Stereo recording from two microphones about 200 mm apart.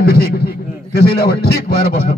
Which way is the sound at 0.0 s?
50° left (ahead or behind).